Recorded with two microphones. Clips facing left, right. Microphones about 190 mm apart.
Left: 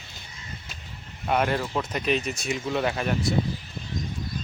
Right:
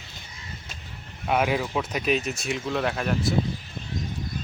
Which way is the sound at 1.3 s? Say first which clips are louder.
Right 1 dB; 5° right (ahead or behind).